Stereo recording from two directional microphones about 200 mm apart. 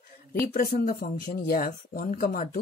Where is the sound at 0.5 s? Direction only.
45° left (ahead or behind).